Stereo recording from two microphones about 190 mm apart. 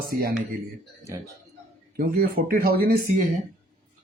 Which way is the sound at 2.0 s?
50° right (ahead or behind).